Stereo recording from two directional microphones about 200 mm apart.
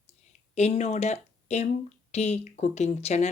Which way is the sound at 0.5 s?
35° left (ahead or behind).